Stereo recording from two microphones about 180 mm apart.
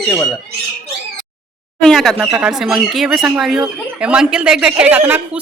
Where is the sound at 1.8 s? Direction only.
Centre (ahead or behind).